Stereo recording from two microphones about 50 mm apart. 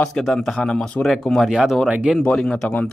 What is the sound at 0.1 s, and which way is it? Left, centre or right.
Speech, centre.